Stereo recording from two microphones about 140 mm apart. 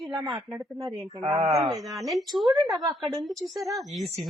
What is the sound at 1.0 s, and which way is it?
Speech, 35° right (ahead or behind).